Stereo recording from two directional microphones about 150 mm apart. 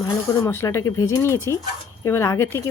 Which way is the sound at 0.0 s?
20° left (ahead or behind).